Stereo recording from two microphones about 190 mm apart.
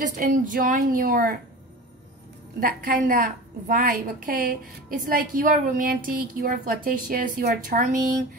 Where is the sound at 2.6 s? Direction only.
45° right (ahead or behind).